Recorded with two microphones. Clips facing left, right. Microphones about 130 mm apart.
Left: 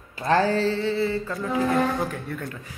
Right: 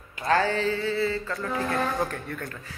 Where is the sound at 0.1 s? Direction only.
30° left (ahead or behind).